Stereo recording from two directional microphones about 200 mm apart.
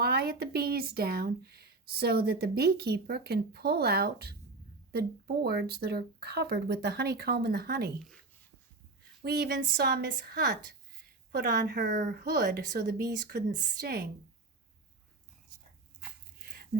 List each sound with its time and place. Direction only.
0.0 s speech: 50° right (ahead or behind)
9.2 s speech: 50° right (ahead or behind)
13.5 s speech: 45° right (ahead or behind)